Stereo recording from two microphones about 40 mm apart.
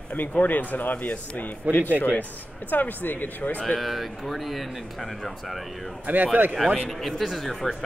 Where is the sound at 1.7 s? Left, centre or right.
Right.